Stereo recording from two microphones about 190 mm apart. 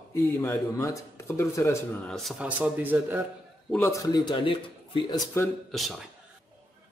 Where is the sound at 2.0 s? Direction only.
Centre (ahead or behind).